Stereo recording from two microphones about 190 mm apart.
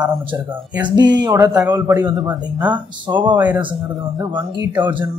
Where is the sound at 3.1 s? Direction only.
25° right (ahead or behind).